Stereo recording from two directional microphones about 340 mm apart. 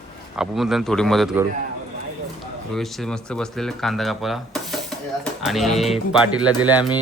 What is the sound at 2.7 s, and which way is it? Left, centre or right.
A man's voice, centre.